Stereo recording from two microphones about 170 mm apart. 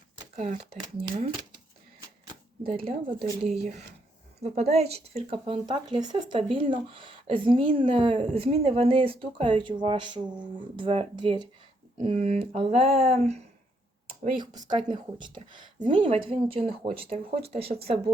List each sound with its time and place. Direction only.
0.3 s speech: 35° right (ahead or behind)
2.6 s speech: 35° right (ahead or behind)
12.1 s speech: 40° right (ahead or behind)
14.3 s speech: 25° right (ahead or behind)